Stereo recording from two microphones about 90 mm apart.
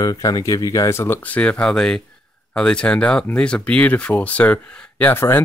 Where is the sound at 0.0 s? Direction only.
45° left (ahead or behind).